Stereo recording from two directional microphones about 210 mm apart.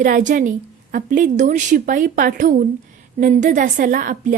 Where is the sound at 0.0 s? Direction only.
35° right (ahead or behind).